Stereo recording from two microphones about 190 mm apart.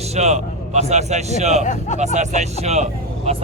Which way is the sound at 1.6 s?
40° left (ahead or behind).